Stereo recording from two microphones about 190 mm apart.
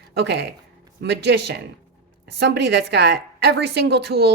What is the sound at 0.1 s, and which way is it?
A woman's voice, 60° right (ahead or behind).